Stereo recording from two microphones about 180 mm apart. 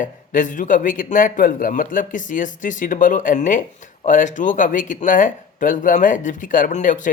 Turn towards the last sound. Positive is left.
turn(degrees=45)  # may be behind; listen again after turning